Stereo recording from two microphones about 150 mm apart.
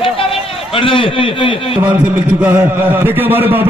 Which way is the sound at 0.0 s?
35° left (ahead or behind).